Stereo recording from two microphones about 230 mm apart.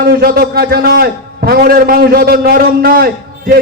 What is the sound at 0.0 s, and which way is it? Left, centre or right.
A man's voice, right.